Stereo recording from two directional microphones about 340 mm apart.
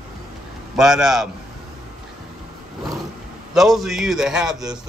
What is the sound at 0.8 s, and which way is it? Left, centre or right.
Speech, centre.